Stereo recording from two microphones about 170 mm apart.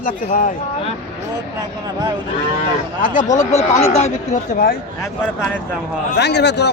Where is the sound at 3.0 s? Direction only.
50° left (ahead or behind).